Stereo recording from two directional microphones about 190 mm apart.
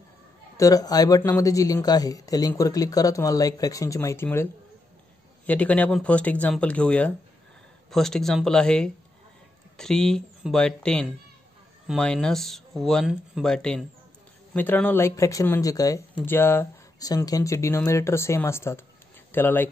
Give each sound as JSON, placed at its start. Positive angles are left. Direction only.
{"t": 0.6, "sound": "speech", "side_deg": 20}
{"t": 5.5, "sound": "speech", "side_deg": 5}